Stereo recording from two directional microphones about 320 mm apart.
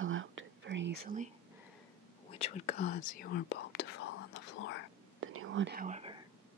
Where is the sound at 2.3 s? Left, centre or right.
Centre; by 4.8 s left.